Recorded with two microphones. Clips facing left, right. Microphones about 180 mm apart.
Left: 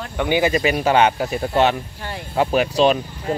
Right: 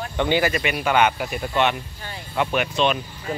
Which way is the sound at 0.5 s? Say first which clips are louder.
Left 4 dB; 35° left (ahead or behind).